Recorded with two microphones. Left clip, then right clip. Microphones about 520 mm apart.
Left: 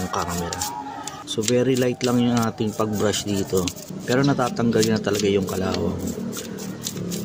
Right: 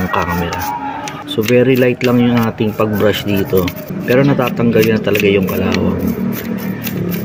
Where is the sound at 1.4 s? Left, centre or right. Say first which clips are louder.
Right 9 dB; left.